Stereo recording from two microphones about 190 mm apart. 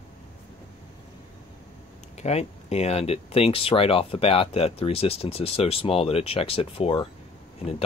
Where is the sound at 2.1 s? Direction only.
35° left (ahead or behind).